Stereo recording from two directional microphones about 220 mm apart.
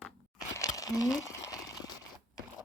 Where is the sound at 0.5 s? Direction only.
15° left (ahead or behind).